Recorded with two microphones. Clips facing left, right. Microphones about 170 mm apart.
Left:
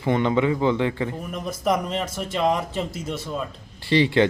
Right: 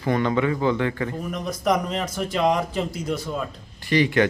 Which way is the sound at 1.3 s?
5° left (ahead or behind).